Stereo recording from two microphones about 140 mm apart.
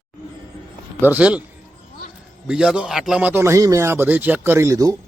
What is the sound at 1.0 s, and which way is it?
Speech, 10° right (ahead or behind).